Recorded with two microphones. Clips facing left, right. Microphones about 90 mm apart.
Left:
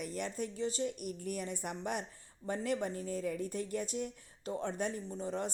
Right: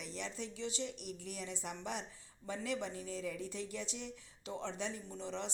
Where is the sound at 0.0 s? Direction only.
50° left (ahead or behind).